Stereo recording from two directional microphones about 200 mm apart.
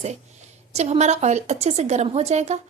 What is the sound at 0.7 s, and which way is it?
A woman's voice, 35° right (ahead or behind).